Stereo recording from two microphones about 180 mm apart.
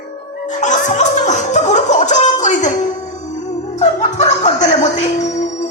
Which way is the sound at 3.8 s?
40° left (ahead or behind).